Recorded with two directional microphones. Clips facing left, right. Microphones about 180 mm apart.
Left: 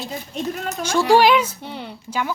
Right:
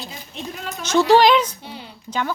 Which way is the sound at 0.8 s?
10° left (ahead or behind).